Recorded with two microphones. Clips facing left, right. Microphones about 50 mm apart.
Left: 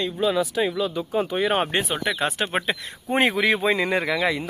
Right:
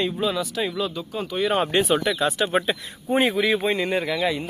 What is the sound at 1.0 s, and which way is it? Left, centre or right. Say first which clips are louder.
Speech: left 3 dB; left.